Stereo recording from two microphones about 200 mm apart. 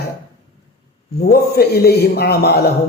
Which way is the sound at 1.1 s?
50° left (ahead or behind).